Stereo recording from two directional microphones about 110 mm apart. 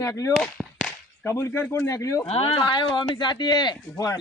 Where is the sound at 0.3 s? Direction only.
5° left (ahead or behind).